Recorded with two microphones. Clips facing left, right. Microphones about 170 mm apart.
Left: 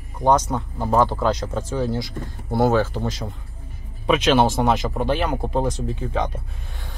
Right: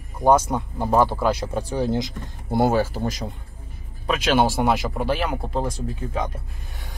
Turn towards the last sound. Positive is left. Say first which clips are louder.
# left 3 dB
turn(degrees=-5)  # may be behind; listen again after turning